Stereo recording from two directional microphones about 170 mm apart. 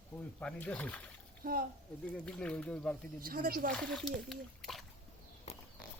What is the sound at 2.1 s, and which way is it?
Speech, 5° left (ahead or behind).